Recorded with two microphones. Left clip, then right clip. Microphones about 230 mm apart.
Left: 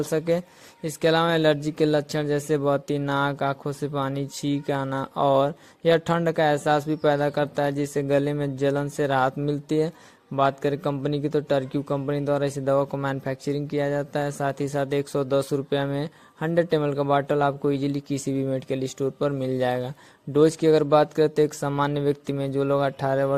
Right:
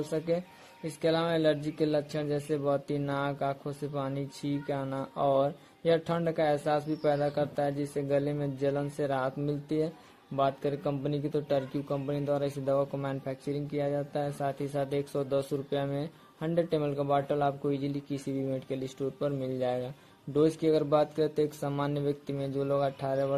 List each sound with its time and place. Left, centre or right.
0.1 s a man's voice: left